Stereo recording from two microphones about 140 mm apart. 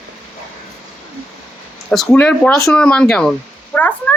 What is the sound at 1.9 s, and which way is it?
A woman's voice, 5° left (ahead or behind).